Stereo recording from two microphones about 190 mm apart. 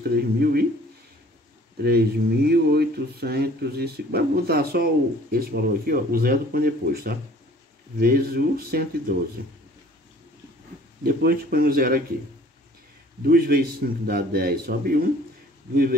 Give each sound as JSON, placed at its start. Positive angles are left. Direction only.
{"t": 0.1, "sound": "speech", "side_deg": -55}
{"t": 1.8, "sound": "speech", "side_deg": -55}
{"t": 11.1, "sound": "speech", "side_deg": -50}
{"t": 13.2, "sound": "speech", "side_deg": -50}